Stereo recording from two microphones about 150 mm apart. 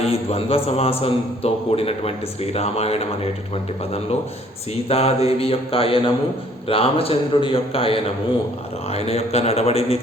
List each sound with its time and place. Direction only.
0.0 s a man's voice: 40° left (ahead or behind)
4.7 s a man's voice: 40° left (ahead or behind)